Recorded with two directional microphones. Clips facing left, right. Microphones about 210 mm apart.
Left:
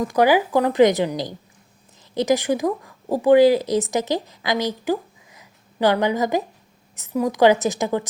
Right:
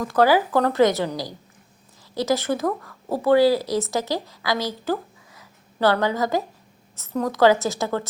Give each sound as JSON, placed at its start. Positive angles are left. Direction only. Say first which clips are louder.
{"t": 0.0, "sound": "a woman's voice", "louder": "left 1 dB", "side_deg": 15}